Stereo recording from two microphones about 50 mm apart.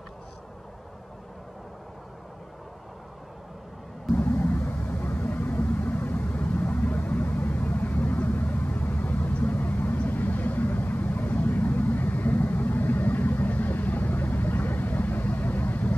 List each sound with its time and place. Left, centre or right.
4.1 s vehicle: left